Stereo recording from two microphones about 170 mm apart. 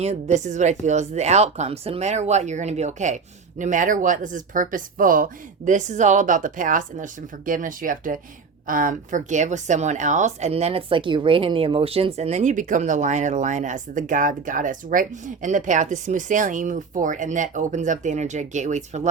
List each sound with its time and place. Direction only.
0.0 s a woman's voice: 40° right (ahead or behind)